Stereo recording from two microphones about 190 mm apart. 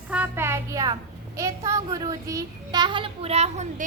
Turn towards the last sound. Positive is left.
turn(degrees=-35)  # may be behind; listen again after turning